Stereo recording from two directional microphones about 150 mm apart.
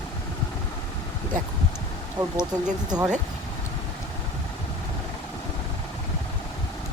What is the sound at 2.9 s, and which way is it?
Speech, 25° right (ahead or behind).